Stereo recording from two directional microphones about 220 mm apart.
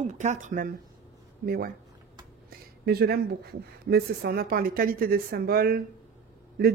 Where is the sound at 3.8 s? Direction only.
45° right (ahead or behind).